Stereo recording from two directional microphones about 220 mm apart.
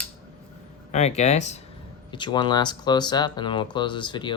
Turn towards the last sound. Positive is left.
turn(degrees=20)  # may be behind; listen again after turning